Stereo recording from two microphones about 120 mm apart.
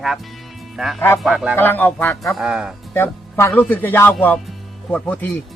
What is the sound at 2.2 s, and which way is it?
Speech, 5° right (ahead or behind).